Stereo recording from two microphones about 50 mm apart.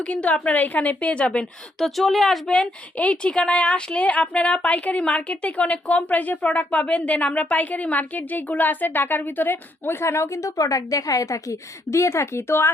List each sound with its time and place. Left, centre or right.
0.1 s a woman's voice: left
1.8 s speech: centre
2.5 s a woman's voice: left